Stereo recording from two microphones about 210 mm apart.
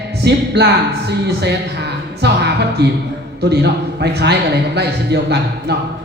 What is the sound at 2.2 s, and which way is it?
Music, 50° right (ahead or behind).